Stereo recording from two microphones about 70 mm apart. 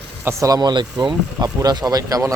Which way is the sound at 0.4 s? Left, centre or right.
Right.